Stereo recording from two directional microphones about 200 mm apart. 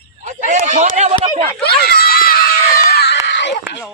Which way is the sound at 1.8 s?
50° left (ahead or behind).